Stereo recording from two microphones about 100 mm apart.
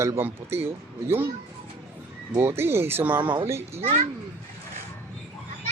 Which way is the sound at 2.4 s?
25° right (ahead or behind).